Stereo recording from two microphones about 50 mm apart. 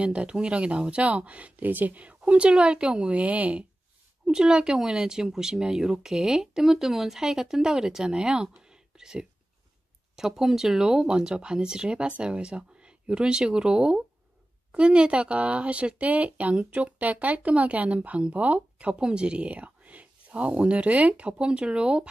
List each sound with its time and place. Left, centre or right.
0.0 s speech: right
4.3 s speech: centre